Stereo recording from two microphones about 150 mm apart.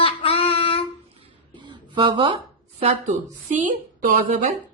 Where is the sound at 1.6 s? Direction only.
35° right (ahead or behind).